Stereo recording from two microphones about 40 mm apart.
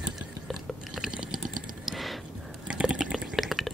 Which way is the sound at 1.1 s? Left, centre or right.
Centre.